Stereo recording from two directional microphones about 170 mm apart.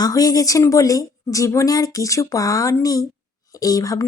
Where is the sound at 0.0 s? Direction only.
20° left (ahead or behind).